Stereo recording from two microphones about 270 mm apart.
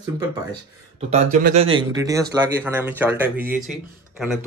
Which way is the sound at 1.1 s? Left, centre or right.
Right.